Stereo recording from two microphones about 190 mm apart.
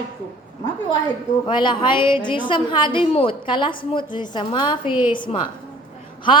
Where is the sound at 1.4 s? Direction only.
25° left (ahead or behind).